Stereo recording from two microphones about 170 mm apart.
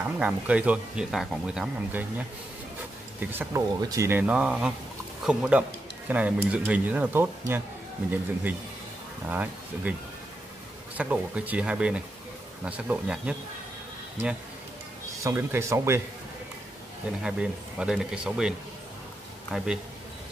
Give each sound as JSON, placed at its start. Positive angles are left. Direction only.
{"t": 0.0, "sound": "speech", "side_deg": -5}
{"t": 9.3, "sound": "speech", "side_deg": -10}
{"t": 11.0, "sound": "speech", "side_deg": -10}
{"t": 15.2, "sound": "speech", "side_deg": -15}
{"t": 17.2, "sound": "speech", "side_deg": -5}
{"t": 19.5, "sound": "speech", "side_deg": -5}